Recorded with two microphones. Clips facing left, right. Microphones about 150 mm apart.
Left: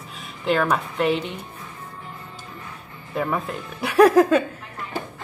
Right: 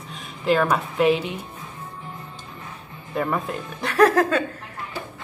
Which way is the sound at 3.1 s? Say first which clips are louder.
Even; centre (ahead or behind).